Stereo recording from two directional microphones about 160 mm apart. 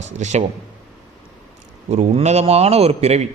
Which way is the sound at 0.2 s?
45° right (ahead or behind).